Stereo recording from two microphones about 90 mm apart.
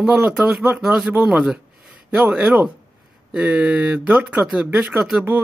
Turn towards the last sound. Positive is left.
turn(degrees=-20)  # may be behind; listen again after turning